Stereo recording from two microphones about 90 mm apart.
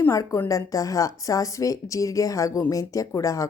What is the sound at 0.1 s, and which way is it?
A woman's voice, 35° left (ahead or behind).